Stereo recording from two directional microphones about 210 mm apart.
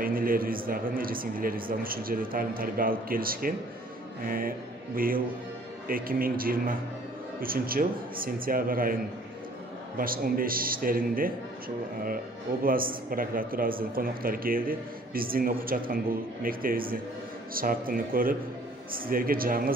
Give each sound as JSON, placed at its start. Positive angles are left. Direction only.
{"t": 0.0, "sound": "a man's voice", "side_deg": -40}
{"t": 9.9, "sound": "speech", "side_deg": -45}
{"t": 12.6, "sound": "speech", "side_deg": -45}